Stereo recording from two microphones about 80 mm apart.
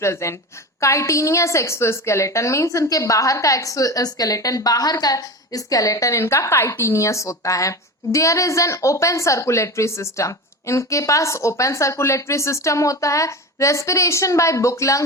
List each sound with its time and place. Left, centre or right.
0.0 s a woman's voice: left